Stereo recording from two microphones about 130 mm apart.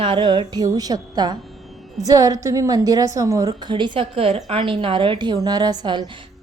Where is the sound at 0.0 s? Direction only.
40° right (ahead or behind).